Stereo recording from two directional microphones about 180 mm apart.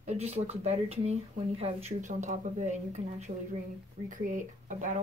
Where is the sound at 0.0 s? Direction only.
40° right (ahead or behind).